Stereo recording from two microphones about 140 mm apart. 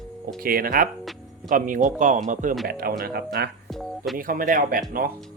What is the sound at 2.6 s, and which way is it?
Speech, 90° right.